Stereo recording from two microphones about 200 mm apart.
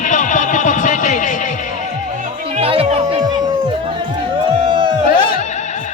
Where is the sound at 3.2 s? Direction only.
20° right (ahead or behind).